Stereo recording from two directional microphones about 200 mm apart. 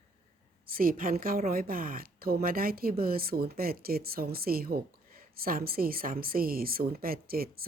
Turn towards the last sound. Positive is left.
turn(degrees=-50)  # may be behind; listen again after turning